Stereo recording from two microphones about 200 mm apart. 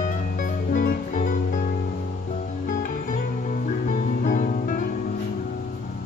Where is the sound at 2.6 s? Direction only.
40° left (ahead or behind).